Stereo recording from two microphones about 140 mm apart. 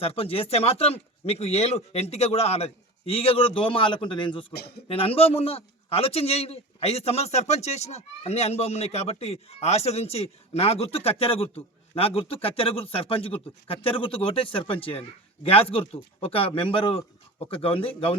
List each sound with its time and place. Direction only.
0.0 s a man's voice: 45° left (ahead or behind)